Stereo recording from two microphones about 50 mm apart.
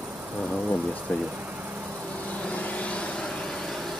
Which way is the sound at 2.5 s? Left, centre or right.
Left.